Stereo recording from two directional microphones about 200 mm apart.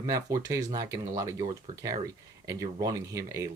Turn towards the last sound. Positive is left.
turn(degrees=-15)  # may be behind; listen again after turning